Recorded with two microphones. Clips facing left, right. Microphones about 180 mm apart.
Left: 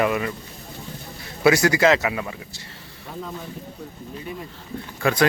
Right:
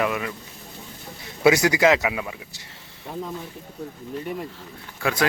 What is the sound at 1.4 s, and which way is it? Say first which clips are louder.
Speech: even; 20° right (ahead or behind).